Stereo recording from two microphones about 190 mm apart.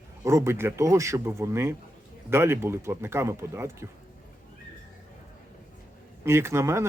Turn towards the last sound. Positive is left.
turn(degrees=-15)  # may be behind; listen again after turning